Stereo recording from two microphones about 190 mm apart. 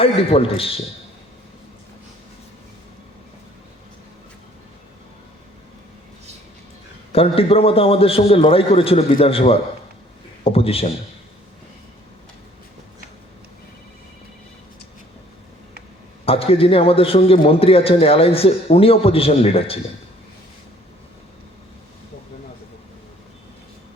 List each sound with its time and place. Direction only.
0.0 s a man's voice: 30° left (ahead or behind)
7.1 s a man's voice: 30° left (ahead or behind)
16.2 s a man's voice: 30° left (ahead or behind)